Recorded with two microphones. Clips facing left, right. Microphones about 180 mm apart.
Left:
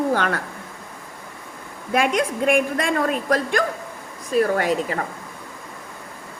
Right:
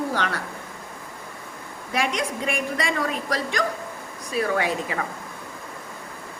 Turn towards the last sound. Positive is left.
turn(degrees=45)  # may be behind; listen again after turning